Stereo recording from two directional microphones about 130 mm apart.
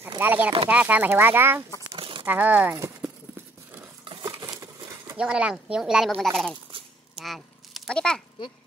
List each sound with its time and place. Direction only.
0.2 s speech: 15° right (ahead or behind)
2.0 s crumpling: 40° right (ahead or behind)
2.2 s speech: 10° right (ahead or behind)
4.0 s a sound: 30° right (ahead or behind)
5.1 s speech: 10° right (ahead or behind)
7.2 s a sound: centre (ahead or behind)